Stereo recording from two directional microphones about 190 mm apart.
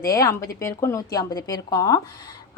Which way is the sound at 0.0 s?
20° left (ahead or behind).